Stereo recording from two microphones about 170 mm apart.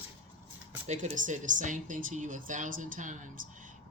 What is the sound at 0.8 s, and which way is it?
Speech, 40° right (ahead or behind).